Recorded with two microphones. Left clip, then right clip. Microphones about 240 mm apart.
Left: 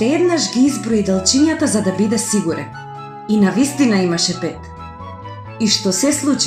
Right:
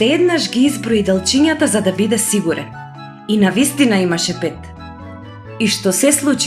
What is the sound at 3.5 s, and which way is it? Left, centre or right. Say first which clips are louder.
Speech: right 2 dB; right.